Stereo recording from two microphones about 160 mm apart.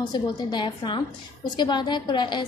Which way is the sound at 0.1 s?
30° left (ahead or behind).